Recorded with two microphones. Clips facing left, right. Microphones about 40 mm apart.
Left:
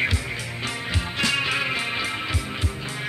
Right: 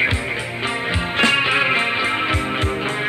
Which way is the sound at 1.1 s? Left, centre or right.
Right.